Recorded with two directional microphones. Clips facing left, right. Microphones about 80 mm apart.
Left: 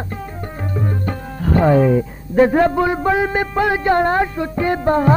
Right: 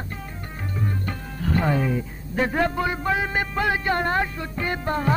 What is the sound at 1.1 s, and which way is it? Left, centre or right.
Speech, left.